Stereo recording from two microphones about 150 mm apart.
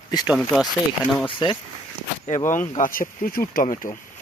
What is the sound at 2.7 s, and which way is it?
Speech, 65° left (ahead or behind).